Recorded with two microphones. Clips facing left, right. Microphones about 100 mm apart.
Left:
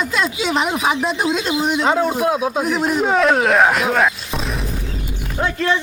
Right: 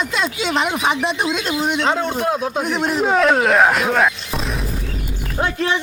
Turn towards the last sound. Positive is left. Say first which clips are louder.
# left 1 dB
turn(degrees=-20)  # may be behind; listen again after turning